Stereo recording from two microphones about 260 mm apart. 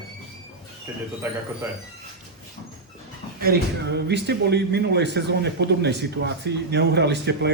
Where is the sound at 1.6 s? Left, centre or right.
Centre.